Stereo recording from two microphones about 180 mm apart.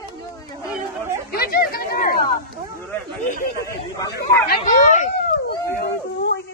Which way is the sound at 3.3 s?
55° left (ahead or behind).